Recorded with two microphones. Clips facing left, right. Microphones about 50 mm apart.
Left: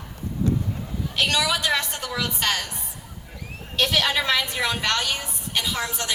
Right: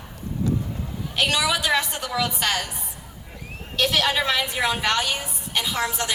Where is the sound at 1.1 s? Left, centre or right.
Centre.